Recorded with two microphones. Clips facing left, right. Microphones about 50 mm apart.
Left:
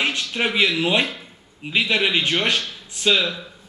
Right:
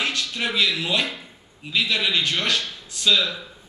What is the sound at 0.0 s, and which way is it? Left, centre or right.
A man's voice, left.